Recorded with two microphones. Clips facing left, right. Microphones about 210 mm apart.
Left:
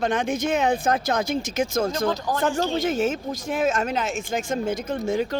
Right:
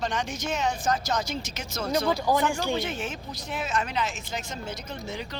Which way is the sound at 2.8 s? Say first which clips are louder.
Left 10 dB; 40° left (ahead or behind).